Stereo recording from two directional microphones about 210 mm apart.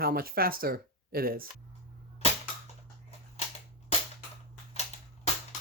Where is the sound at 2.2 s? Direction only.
30° left (ahead or behind).